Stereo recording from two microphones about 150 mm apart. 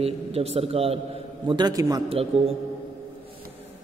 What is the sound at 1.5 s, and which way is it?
Speech, 30° right (ahead or behind).